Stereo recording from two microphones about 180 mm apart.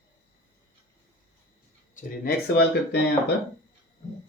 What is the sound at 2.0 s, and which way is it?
Speech, 60° left (ahead or behind).